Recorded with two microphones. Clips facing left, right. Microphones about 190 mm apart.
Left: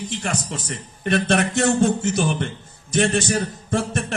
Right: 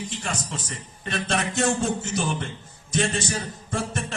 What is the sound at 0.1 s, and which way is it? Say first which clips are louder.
A man's voice: left 5 dB; 65° left (ahead or behind).